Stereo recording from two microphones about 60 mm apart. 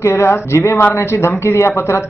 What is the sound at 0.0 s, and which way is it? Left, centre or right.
A man's voice, left.